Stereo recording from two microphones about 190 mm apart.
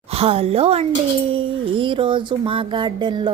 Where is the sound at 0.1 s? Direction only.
30° right (ahead or behind).